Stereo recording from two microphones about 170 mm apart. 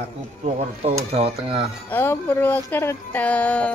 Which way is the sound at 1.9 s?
15° left (ahead or behind).